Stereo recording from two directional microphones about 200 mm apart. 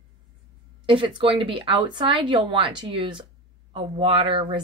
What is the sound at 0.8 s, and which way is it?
Speech, 25° right (ahead or behind).